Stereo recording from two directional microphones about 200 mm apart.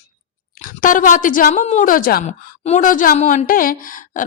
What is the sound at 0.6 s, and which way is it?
A woman's voice, 40° left (ahead or behind).